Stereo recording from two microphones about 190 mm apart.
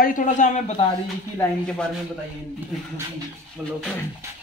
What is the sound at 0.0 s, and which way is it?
Speech, 45° left (ahead or behind).